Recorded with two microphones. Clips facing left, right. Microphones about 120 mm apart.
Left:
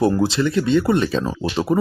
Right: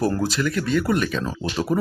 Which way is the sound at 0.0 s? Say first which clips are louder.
Left 5 dB; 25° left (ahead or behind).